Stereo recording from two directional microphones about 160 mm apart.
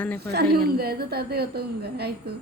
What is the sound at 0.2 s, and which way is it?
A woman's voice, 90° right.